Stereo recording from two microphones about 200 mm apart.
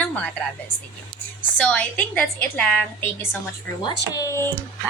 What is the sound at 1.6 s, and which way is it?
A woman's voice, 5° left (ahead or behind).